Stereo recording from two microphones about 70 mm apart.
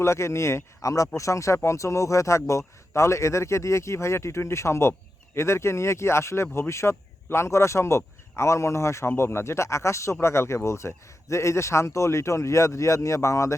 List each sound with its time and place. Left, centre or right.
0.0 s speech: left